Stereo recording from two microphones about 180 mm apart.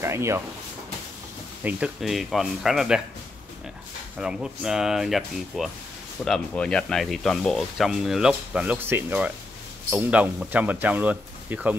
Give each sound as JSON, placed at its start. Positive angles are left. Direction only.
{"t": 0.0, "sound": "a sound", "side_deg": -15}
{"t": 1.6, "sound": "speech", "side_deg": -10}
{"t": 4.2, "sound": "speech", "side_deg": -5}